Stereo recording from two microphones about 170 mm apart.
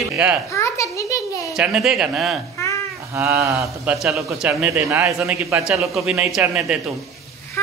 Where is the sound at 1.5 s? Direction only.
5° right (ahead or behind).